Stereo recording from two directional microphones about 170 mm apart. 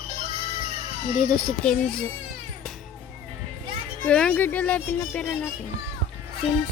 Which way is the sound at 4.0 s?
5° left (ahead or behind).